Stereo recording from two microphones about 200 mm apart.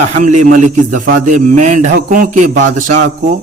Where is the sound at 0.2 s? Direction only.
40° right (ahead or behind).